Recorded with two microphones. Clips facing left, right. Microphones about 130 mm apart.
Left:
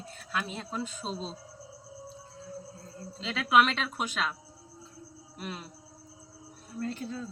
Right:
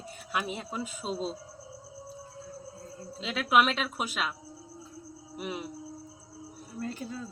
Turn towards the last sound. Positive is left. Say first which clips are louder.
# left 1 dB
turn(degrees=-5)  # may be behind; listen again after turning